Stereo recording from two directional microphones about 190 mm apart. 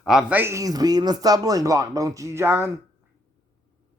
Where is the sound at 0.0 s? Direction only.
5° right (ahead or behind).